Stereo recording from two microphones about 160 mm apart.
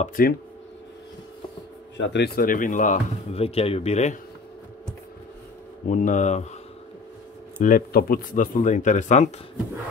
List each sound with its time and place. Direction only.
0.0 s speech: 60° left (ahead or behind)
2.0 s speech: 85° left; by 3.0 s 55° left (ahead or behind)
3.3 s speech: 40° left (ahead or behind)
5.9 s speech: 55° left (ahead or behind)
7.5 s speech: 55° left (ahead or behind)